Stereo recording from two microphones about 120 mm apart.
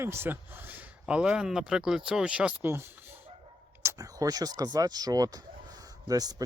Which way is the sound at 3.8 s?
30° right (ahead or behind).